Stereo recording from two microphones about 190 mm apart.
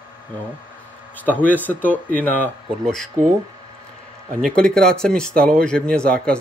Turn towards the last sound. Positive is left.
turn(degrees=5)  # may be behind; listen again after turning